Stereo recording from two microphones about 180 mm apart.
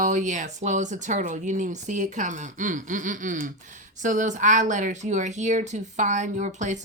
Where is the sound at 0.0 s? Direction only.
45° right (ahead or behind).